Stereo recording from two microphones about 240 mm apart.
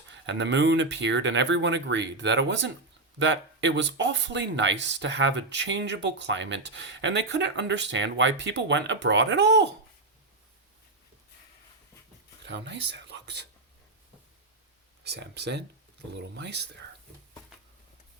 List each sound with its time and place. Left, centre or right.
0.1 s speech: right
12.5 s speech: right
15.0 s speech: right